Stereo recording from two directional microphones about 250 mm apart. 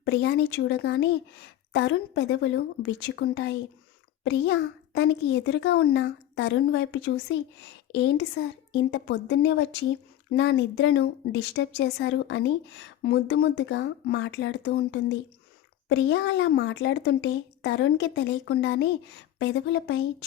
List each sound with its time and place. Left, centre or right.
0.0 s a woman's voice: left